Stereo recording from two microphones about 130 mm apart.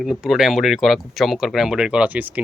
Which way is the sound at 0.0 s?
Centre (ahead or behind).